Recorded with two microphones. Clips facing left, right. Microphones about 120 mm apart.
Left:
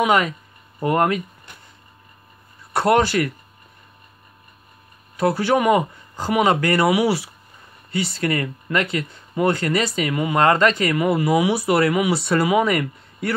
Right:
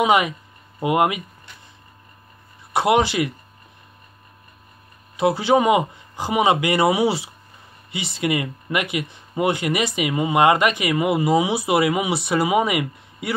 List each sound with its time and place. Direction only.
0.0 s speech: 15° right (ahead or behind)
2.7 s speech: 15° right (ahead or behind)
5.1 s speech: 20° right (ahead or behind)